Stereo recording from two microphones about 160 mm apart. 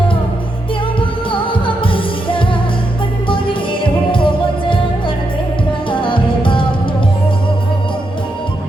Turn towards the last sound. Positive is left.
turn(degrees=30)  # may be behind; listen again after turning